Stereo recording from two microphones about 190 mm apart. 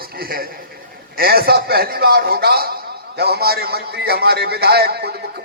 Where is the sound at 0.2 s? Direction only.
50° right (ahead or behind).